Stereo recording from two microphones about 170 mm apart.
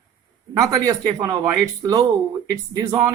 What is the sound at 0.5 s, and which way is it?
Speech, 20° right (ahead or behind).